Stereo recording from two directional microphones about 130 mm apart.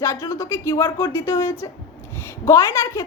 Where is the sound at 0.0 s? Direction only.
20° left (ahead or behind).